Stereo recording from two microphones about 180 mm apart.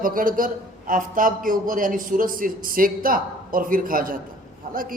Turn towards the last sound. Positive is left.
turn(degrees=-50)  # may be behind; listen again after turning